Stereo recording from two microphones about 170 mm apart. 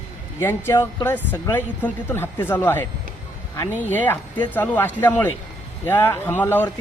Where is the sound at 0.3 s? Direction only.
15° left (ahead or behind).